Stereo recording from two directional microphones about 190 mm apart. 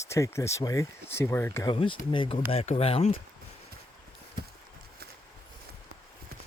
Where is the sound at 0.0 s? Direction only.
15° left (ahead or behind).